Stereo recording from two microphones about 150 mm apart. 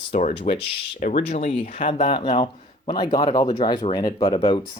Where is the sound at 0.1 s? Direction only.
55° left (ahead or behind).